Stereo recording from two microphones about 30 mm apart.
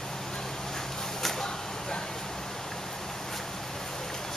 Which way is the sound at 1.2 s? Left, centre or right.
Centre.